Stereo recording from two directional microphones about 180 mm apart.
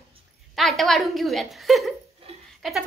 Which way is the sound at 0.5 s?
Centre (ahead or behind).